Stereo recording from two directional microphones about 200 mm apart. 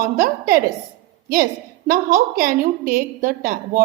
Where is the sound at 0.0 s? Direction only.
45° right (ahead or behind).